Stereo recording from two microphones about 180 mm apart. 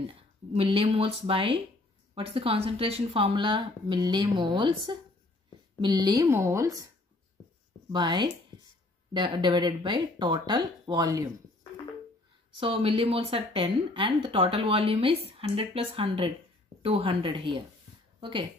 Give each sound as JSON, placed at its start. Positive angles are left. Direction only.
{"t": 0.1, "sound": "speech", "side_deg": -30}
{"t": 7.9, "sound": "speech", "side_deg": -25}
{"t": 12.5, "sound": "speech", "side_deg": -30}